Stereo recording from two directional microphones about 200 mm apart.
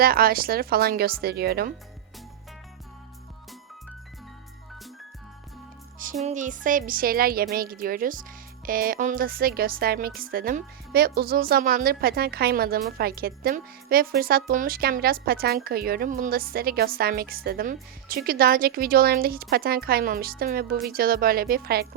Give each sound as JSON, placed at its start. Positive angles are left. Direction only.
{"t": 0.0, "sound": "a woman's voice", "side_deg": -50}
{"t": 6.2, "sound": "a woman's voice", "side_deg": -40}